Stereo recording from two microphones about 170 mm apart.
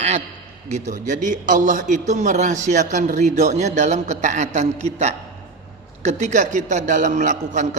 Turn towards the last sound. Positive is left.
turn(degrees=-45)  # may be behind; listen again after turning